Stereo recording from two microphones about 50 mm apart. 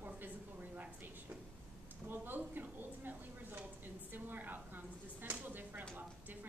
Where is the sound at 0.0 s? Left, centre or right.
Right.